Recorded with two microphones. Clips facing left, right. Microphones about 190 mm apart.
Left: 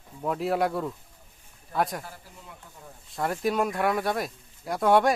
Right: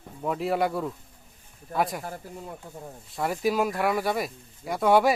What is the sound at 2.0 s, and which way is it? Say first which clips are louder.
Speech: right 9 dB; 45° right (ahead or behind).